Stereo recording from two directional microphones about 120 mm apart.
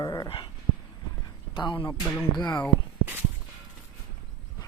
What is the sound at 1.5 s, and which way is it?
Speech, 40° left (ahead or behind).